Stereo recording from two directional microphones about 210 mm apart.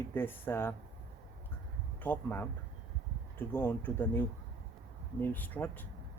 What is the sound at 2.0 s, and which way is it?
Speech, 10° left (ahead or behind).